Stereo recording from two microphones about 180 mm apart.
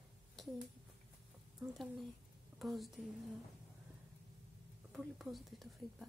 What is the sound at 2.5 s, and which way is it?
Speech, centre (ahead or behind).